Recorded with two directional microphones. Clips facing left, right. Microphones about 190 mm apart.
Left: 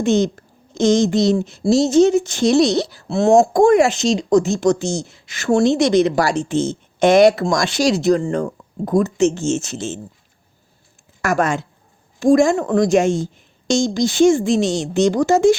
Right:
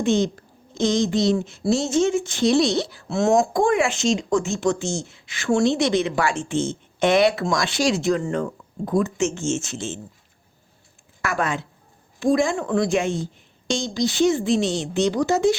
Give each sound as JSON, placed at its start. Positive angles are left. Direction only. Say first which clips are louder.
{"t": 0.0, "sound": "a woman's voice", "louder": "left 4 dB", "side_deg": 45}
{"t": 11.2, "sound": "a woman's voice", "louder": "left 6 dB", "side_deg": 45}